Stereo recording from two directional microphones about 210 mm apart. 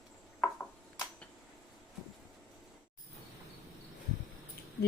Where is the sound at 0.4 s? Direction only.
Centre (ahead or behind).